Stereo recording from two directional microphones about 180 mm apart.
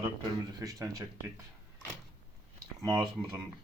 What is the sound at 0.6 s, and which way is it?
Speech, 20° right (ahead or behind).